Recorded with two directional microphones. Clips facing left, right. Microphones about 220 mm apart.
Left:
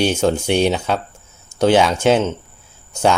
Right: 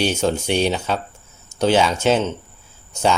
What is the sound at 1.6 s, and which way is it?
Speech, 10° left (ahead or behind).